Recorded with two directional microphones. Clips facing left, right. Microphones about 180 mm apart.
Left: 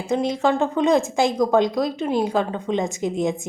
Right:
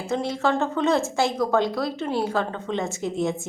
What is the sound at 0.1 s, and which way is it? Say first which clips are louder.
Speech: left 3 dB; 15° left (ahead or behind).